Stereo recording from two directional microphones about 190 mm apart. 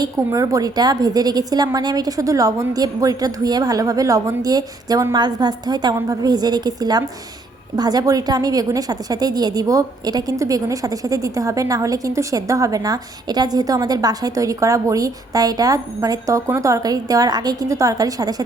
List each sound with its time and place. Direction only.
0.0 s a woman's voice: 20° right (ahead or behind)